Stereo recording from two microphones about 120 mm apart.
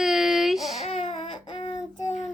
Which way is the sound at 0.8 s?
60° left (ahead or behind).